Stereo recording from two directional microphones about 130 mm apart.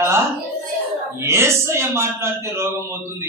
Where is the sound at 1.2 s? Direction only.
20° right (ahead or behind).